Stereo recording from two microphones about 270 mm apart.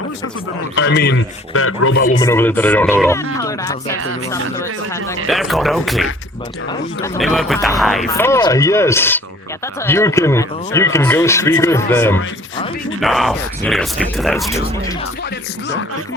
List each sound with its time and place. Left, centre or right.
0.8 s a man's voice: left
1.5 s speech: left
2.2 s speech: centre
5.3 s speech: centre
7.2 s speech: centre
8.1 s speech: centre